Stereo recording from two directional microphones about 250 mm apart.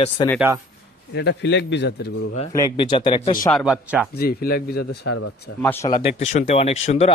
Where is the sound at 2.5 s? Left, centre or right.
Centre.